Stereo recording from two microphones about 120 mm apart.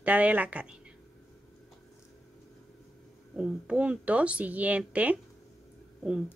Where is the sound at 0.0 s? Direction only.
10° right (ahead or behind).